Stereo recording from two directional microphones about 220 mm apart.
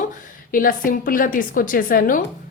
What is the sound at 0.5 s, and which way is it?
A woman's voice, 40° left (ahead or behind).